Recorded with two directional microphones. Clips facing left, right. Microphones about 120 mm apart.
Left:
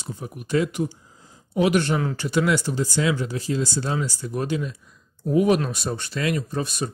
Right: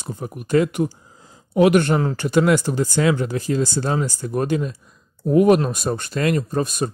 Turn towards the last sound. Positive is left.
turn(degrees=-45)  # may be behind; listen again after turning